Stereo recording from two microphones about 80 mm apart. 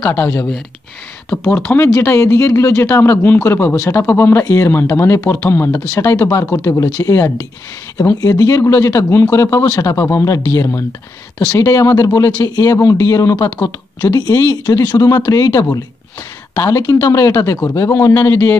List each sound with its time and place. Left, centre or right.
1.3 s speech: left
5.9 s speech: left